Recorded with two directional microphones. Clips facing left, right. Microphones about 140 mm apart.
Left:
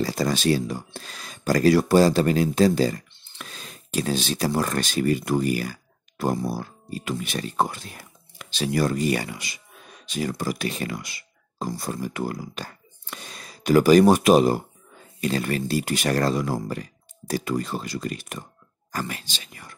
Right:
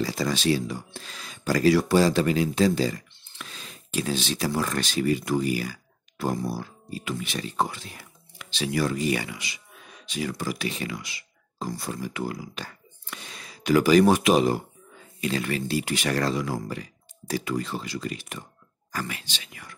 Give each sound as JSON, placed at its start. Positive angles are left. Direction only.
{"t": 0.0, "sound": "speech", "side_deg": 45}